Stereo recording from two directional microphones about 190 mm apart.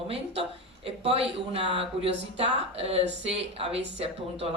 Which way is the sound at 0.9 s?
30° right (ahead or behind).